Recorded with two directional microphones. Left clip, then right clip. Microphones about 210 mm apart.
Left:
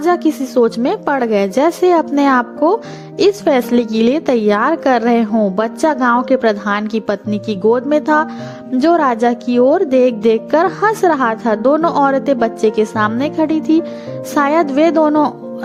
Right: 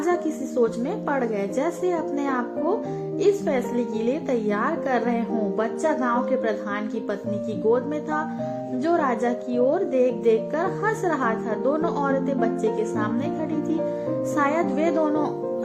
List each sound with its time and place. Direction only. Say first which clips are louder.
0.0 s a woman's voice: left 10 dB; 45° left (ahead or behind)